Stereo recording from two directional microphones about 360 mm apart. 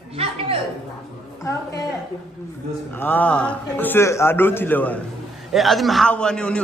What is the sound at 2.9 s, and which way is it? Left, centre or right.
A man's voice, centre.